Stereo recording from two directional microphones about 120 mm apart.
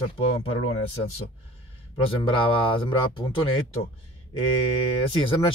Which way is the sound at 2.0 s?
45° left (ahead or behind).